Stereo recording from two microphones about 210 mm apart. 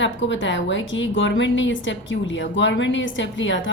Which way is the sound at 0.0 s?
60° left (ahead or behind).